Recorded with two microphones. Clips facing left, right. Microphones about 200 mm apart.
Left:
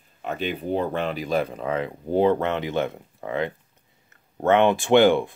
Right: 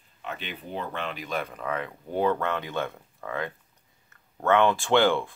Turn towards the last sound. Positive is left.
turn(degrees=20)  # may be behind; listen again after turning